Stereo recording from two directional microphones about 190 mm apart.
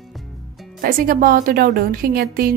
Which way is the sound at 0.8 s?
50° right (ahead or behind).